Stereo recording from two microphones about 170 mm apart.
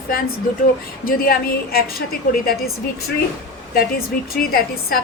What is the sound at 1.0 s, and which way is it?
A woman's voice, 60° left (ahead or behind).